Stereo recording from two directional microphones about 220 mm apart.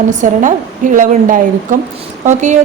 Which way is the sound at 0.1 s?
35° right (ahead or behind).